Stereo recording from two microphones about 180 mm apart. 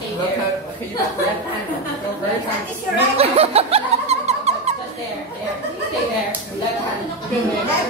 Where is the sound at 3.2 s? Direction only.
35° right (ahead or behind).